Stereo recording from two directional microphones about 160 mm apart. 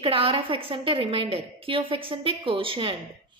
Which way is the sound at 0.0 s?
35° right (ahead or behind).